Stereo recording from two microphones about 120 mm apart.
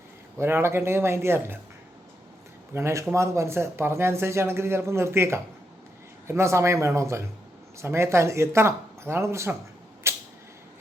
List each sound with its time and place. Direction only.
0.3 s speech: 20° right (ahead or behind)
2.7 s speech: 25° right (ahead or behind)
10.0 s a sound: 20° right (ahead or behind)